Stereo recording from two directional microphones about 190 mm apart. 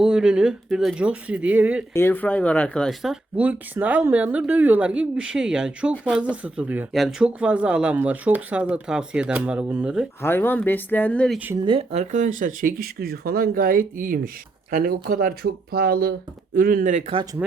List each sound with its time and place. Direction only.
0.0 s speech: 5° right (ahead or behind)
1.9 s speech: 10° left (ahead or behind); by 10.1 s 5° right (ahead or behind)
10.2 s speech: 10° left (ahead or behind)
11.3 s speech: 10° right (ahead or behind)
11.6 s speech: 30° right (ahead or behind); by 17.0 s 45° right (ahead or behind)